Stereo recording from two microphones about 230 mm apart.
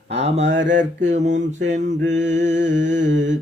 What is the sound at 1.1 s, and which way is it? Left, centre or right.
Mantra, right.